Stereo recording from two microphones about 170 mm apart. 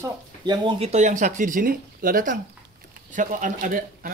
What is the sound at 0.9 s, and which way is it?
Speech, 45° right (ahead or behind).